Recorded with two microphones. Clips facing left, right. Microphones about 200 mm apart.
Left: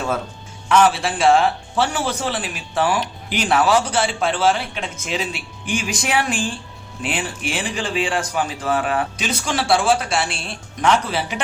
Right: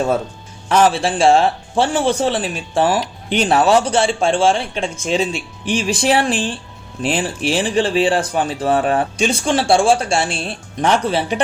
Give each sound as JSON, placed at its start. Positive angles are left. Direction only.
{"t": 0.7, "sound": "a man's voice", "side_deg": -30}